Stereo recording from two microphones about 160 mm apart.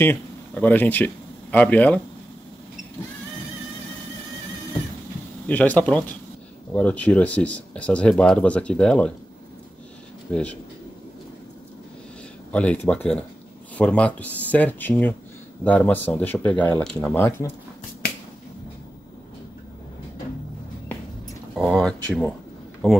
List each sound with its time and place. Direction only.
0.0 s speech: 10° left (ahead or behind)
5.5 s speech: 10° left (ahead or behind)
10.3 s speech: 5° left (ahead or behind)
12.4 s speech: 10° left (ahead or behind)
21.5 s speech: centre (ahead or behind)